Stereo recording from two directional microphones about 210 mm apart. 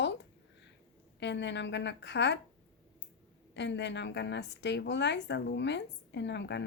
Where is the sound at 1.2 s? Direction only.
55° left (ahead or behind).